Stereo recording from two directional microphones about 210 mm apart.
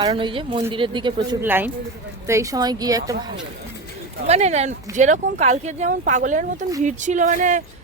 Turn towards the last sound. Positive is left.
turn(degrees=-35)  # may be behind; listen again after turning